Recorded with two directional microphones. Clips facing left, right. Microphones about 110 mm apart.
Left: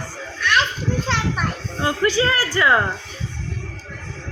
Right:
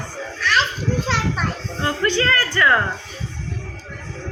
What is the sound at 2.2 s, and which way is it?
Speech, 15° left (ahead or behind).